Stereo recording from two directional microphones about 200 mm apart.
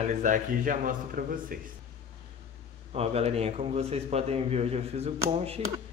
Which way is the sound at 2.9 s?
30° right (ahead or behind).